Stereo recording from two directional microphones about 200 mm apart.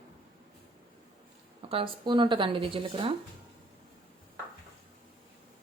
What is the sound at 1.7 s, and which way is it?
Speech, 25° right (ahead or behind).